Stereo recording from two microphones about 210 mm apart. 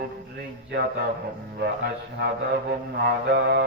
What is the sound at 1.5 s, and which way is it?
Music, 50° right (ahead or behind).